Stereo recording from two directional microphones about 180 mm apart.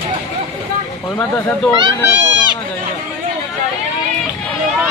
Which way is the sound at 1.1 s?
10° left (ahead or behind).